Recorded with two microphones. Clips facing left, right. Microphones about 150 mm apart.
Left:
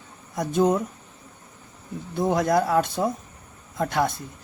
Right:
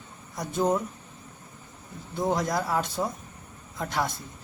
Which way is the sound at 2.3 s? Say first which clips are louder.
Left 7 dB; 60° left (ahead or behind).